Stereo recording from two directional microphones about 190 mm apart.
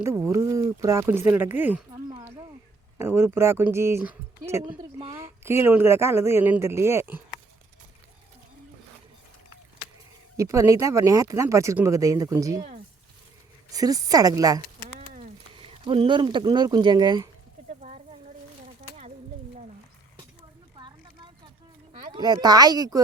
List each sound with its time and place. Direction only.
0.0 s a woman's voice: 15° right (ahead or behind)
2.0 s a sound: 20° right (ahead or behind)
3.0 s a woman's voice: 10° right (ahead or behind)
10.3 s a woman's voice: 15° right (ahead or behind)
13.7 s speech: 20° right (ahead or behind)
14.9 s a sound: 40° right (ahead or behind)
15.5 s speech: 30° right (ahead or behind)
17.7 s a sound: 40° right (ahead or behind)
22.1 s speech: 20° right (ahead or behind)